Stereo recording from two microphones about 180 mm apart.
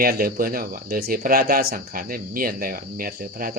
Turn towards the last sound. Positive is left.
turn(degrees=-50)  # may be behind; listen again after turning